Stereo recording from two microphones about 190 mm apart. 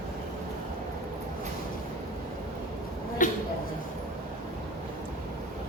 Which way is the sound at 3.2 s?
45° left (ahead or behind).